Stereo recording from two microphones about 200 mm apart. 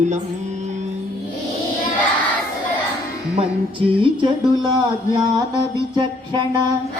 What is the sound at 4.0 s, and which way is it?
Speech, 20° right (ahead or behind).